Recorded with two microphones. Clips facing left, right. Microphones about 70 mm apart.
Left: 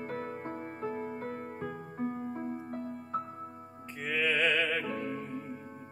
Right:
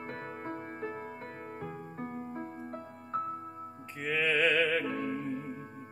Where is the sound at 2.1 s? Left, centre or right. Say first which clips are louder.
Left 2 dB; right.